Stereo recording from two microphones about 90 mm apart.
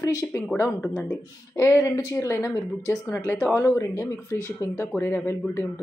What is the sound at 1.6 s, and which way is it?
A woman's voice, 25° left (ahead or behind).